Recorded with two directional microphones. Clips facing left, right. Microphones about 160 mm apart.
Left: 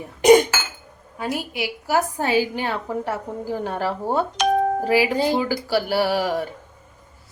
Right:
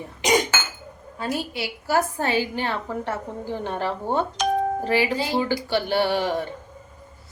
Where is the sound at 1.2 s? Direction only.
15° left (ahead or behind).